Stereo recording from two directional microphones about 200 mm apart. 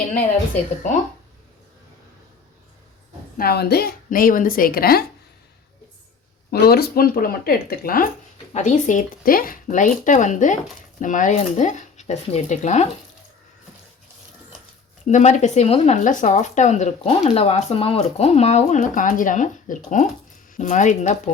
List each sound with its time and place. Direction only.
0.1 s speech: 40° left (ahead or behind)
3.3 s a woman's voice: 50° left (ahead or behind)
6.5 s a woman's voice: 50° left (ahead or behind); by 12.9 s 35° left (ahead or behind)
15.0 s speech: 35° left (ahead or behind)